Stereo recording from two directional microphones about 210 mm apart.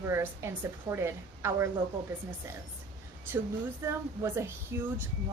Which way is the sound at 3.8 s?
10° right (ahead or behind).